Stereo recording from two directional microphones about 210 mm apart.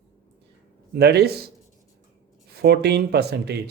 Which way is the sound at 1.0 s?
50° right (ahead or behind).